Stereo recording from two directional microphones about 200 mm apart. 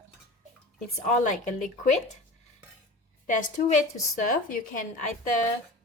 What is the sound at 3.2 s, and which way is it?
A woman's voice, 40° left (ahead or behind).